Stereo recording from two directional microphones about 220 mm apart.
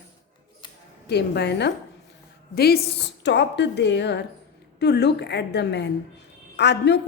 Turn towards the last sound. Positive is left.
turn(degrees=50)  # may be behind; listen again after turning